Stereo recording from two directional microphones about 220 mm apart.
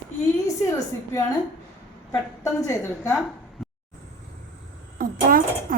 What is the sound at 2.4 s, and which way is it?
Speech, 15° left (ahead or behind).